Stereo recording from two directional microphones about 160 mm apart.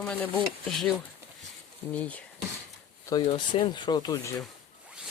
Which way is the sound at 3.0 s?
25° left (ahead or behind).